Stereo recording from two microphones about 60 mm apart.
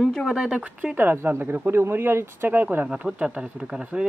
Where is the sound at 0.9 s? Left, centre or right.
Right.